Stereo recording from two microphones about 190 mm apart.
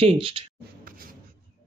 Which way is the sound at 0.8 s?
50° right (ahead or behind).